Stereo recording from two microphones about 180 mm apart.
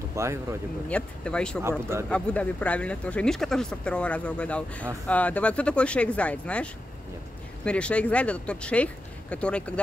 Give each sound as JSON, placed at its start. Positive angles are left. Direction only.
{"t": 0.1, "sound": "speech", "side_deg": -15}
{"t": 0.8, "sound": "speech", "side_deg": 5}
{"t": 1.6, "sound": "speech", "side_deg": -15}
{"t": 2.0, "sound": "speech", "side_deg": 5}